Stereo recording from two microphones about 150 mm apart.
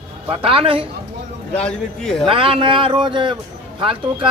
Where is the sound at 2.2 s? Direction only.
35° right (ahead or behind).